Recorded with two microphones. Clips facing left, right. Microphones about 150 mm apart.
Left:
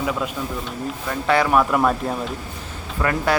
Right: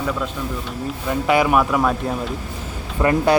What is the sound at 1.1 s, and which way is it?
Speech, 15° right (ahead or behind).